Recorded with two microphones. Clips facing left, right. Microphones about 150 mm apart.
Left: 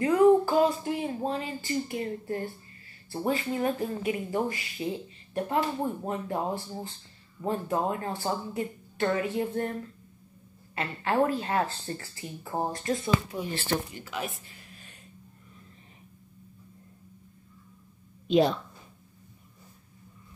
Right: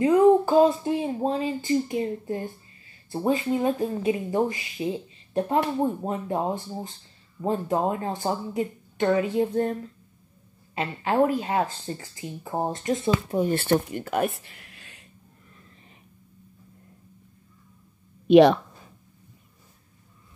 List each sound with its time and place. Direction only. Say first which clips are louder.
0.0 s a sound: right 3 dB; 20° right (ahead or behind)
3.1 s speech: right 5 dB; 20° right (ahead or behind)
13.3 s speech: right 8 dB; 50° right (ahead or behind); by 15.0 s 85° right
18.2 s speech: right 9 dB; 70° right (ahead or behind)